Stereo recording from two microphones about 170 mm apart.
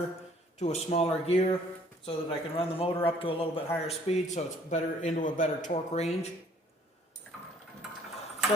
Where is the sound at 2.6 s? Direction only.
35° left (ahead or behind).